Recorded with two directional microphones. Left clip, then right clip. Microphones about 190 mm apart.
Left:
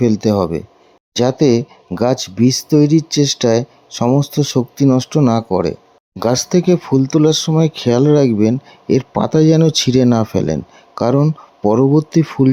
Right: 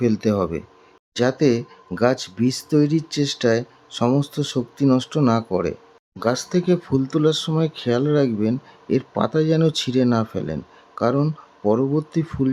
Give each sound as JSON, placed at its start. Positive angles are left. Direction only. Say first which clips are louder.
{"t": 0.0, "sound": "speech", "louder": "left 6 dB", "side_deg": 20}
{"t": 1.1, "sound": "speech", "louder": "left 6 dB", "side_deg": 30}